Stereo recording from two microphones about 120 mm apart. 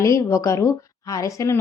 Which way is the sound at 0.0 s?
25° left (ahead or behind).